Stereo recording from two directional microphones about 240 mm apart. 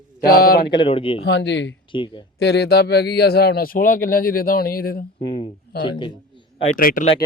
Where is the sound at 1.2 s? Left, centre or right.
Left.